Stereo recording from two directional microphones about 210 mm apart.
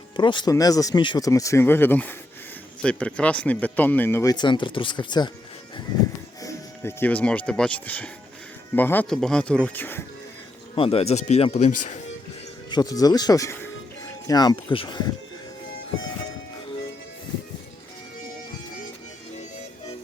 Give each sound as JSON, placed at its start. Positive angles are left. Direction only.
{"t": 0.2, "sound": "speech", "side_deg": 20}
{"t": 6.4, "sound": "speech", "side_deg": 10}
{"t": 10.8, "sound": "speech", "side_deg": 30}
{"t": 12.7, "sound": "speech", "side_deg": 15}